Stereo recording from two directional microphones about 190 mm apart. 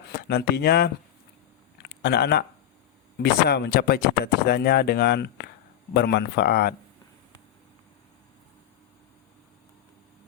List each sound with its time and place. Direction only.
0.1 s speech: 60° left (ahead or behind)
1.8 s a sound: 60° left (ahead or behind)
3.5 s speech: 60° left (ahead or behind)